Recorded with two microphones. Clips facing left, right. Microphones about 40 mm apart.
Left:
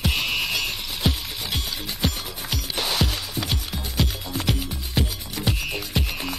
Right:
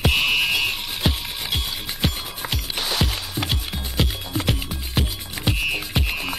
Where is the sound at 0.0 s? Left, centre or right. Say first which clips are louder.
Right 5 dB; right.